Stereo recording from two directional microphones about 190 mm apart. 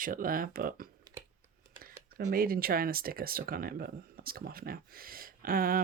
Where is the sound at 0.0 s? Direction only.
45° right (ahead or behind).